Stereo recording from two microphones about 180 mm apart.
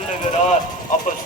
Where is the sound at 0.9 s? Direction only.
45° left (ahead or behind).